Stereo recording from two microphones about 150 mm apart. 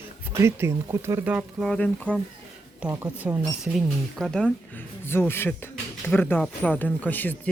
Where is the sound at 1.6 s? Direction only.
5° left (ahead or behind).